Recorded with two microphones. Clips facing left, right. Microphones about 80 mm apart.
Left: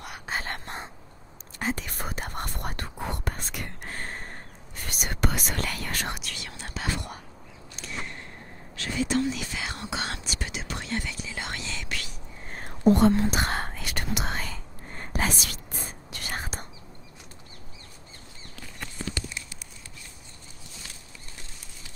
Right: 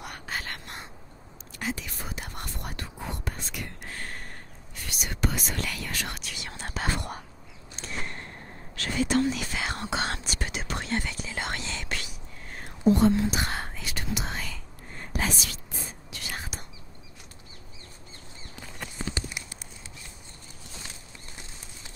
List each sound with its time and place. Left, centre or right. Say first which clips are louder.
0.3 s a sound: left 4 dB; left
1.6 s whispering: left 3 dB; left
4.0 s whispering: left 2 dB; left
5.7 s whispering: left 2 dB; left
6.5 s whispering: right 2 dB; right
8.7 s whispering: right 1 dB; right
12.4 s whispering: left 2 dB; left
12.8 s whispering: left 1 dB; left
14.4 s whispering: left 2 dB; left
18.9 s a sound: even; centre